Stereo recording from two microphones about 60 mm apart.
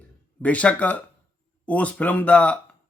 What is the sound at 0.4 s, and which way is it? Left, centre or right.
A man's voice, left.